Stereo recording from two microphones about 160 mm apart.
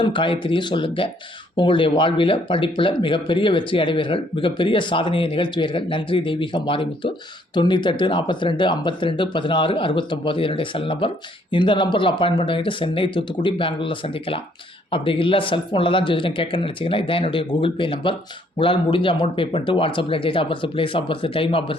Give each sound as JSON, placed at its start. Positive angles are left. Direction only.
{"t": 0.0, "sound": "speech", "side_deg": 30}